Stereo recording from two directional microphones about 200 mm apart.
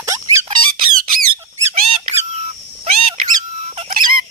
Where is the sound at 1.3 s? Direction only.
30° right (ahead or behind).